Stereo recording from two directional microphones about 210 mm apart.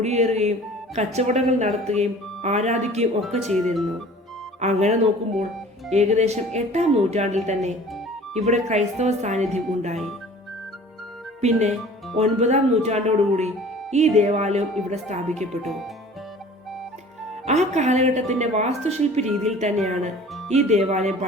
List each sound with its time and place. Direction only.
0.0 s speech: 30° right (ahead or behind)
3.4 s speech: centre (ahead or behind)
4.6 s speech: 30° right (ahead or behind)
11.3 s speech: 35° right (ahead or behind)
15.6 s speech: centre (ahead or behind)
17.4 s speech: 35° right (ahead or behind)